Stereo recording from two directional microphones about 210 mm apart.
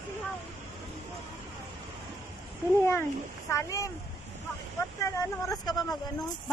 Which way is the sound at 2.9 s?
10° left (ahead or behind).